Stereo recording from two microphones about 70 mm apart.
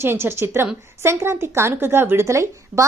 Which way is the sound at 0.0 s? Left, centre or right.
Right.